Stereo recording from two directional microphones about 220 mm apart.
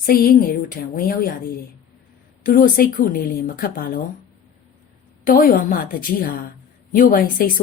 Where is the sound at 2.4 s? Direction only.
40° left (ahead or behind).